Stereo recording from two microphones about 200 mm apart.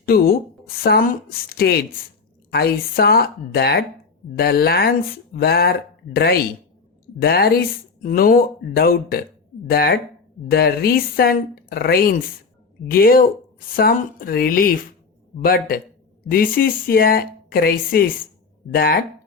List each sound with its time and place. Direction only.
0.0 s a woman's voice: 50° left (ahead or behind)